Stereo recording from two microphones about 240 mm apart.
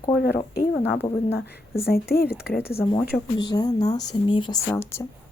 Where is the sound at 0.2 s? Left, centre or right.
Left.